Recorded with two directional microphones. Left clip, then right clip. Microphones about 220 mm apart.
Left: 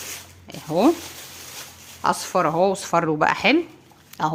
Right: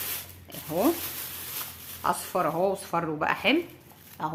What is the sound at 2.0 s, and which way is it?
Speech, 45° left (ahead or behind).